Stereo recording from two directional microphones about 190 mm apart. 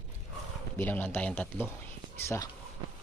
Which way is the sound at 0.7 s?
10° left (ahead or behind).